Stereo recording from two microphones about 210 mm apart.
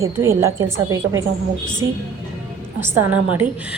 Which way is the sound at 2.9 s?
90° right.